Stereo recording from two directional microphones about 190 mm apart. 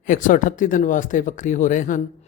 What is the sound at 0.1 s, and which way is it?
Speech, 45° left (ahead or behind).